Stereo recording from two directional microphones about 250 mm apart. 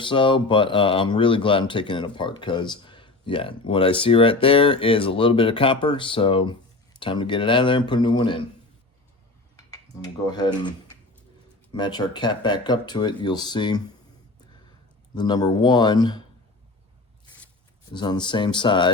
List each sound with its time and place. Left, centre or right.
0.0 s speech: centre
9.7 s speech: centre
15.1 s speech: centre
17.9 s speech: centre